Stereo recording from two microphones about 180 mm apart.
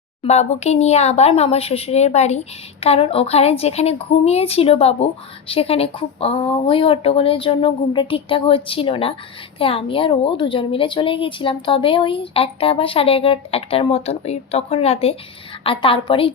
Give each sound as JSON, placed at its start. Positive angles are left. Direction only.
{"t": 0.2, "sound": "a woman's voice", "side_deg": 35}